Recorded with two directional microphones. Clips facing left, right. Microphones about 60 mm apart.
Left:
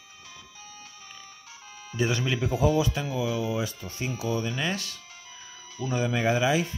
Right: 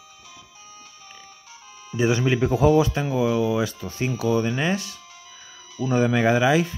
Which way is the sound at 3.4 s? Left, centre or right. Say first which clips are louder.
Right 6 dB; right.